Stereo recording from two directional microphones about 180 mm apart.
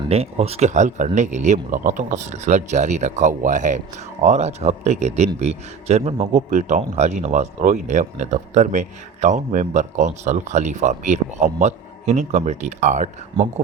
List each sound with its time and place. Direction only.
0.0 s a man's voice: 35° right (ahead or behind)